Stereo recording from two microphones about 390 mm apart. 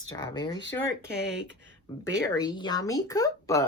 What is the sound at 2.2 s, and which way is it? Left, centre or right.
Speech, centre.